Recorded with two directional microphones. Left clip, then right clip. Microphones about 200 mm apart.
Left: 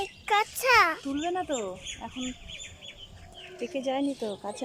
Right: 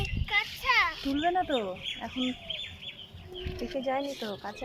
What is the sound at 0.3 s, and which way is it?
Speech, 65° left (ahead or behind).